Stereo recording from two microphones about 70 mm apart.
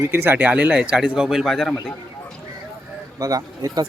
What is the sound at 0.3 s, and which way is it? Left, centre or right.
Speech, right.